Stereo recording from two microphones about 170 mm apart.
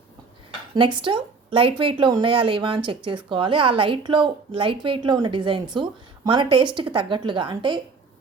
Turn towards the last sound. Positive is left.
turn(degrees=-25)  # may be behind; listen again after turning